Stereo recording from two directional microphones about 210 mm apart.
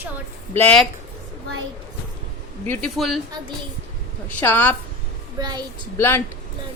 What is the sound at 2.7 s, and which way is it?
Speech, 5° left (ahead or behind).